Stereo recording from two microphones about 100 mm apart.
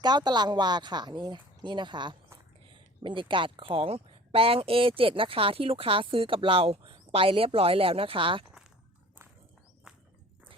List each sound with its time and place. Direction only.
0.0 s speech: 45° right (ahead or behind)
9.9 s walk: 5° right (ahead or behind)